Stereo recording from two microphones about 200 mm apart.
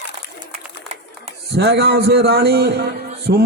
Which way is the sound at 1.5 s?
55° right (ahead or behind).